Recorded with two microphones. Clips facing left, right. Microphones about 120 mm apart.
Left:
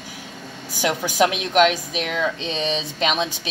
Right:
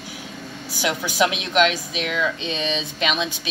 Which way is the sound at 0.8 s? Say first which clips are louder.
Left 2 dB; 40° left (ahead or behind).